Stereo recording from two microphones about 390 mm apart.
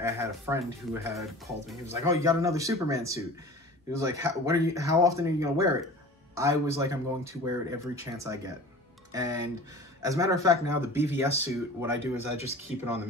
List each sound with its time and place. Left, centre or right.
0.0 s speech: centre
12.0 s speech: centre